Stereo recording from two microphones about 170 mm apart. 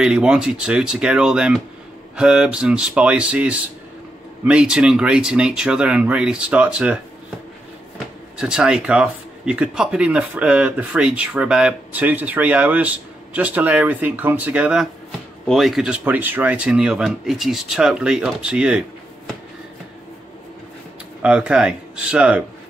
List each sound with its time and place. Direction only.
0.0 s speech: 5° right (ahead or behind)
8.4 s speech: 5° right (ahead or behind)
21.2 s speech: 5° right (ahead or behind)